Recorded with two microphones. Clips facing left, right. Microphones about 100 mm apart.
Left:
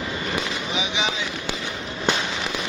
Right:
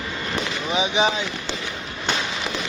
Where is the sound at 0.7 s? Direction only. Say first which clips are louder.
Right 8 dB; 35° right (ahead or behind).